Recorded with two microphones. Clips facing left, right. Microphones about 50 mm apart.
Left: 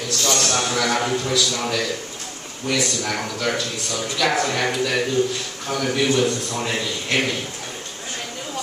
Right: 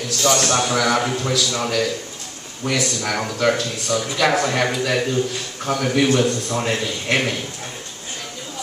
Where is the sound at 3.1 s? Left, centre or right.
Right.